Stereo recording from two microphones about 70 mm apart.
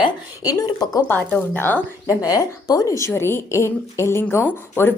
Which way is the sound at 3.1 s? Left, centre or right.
Left.